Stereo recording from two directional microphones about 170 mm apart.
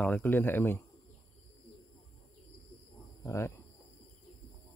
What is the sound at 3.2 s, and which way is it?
Cricket, 15° left (ahead or behind).